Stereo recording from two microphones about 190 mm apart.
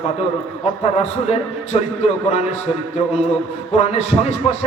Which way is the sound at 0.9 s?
35° left (ahead or behind).